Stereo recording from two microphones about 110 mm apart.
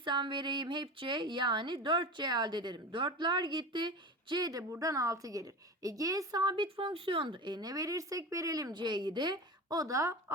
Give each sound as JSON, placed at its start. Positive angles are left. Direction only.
{"t": 0.0, "sound": "a woman's voice", "side_deg": -45}